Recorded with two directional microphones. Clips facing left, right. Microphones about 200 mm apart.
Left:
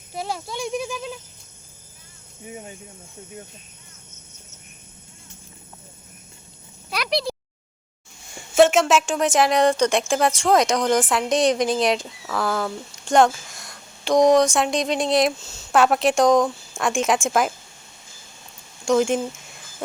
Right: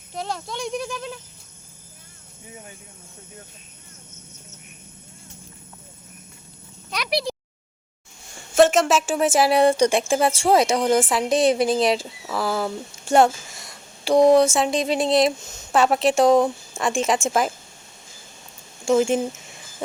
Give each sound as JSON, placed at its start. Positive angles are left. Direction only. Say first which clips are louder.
{"t": 0.1, "sound": "a woman's voice", "louder": "even", "side_deg": 5}
{"t": 2.5, "sound": "speech", "louder": "left 5 dB", "side_deg": 25}
{"t": 7.1, "sound": "a sound", "louder": "even", "side_deg": -10}
{"t": 8.5, "sound": "a woman's voice", "louder": "left 1 dB", "side_deg": 0}
{"t": 15.4, "sound": "speech", "louder": "right 1 dB", "side_deg": -55}
{"t": 15.7, "sound": "a woman's voice", "louder": "even", "side_deg": 0}
{"t": 18.9, "sound": "a woman's voice", "louder": "right 1 dB", "side_deg": -5}